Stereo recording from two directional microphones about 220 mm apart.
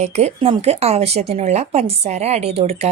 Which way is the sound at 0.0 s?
30° right (ahead or behind).